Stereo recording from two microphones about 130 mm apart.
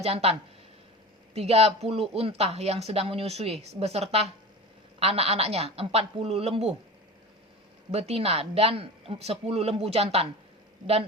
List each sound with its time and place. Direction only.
0.0 s speech: 50° right (ahead or behind)
7.9 s speech: 50° right (ahead or behind)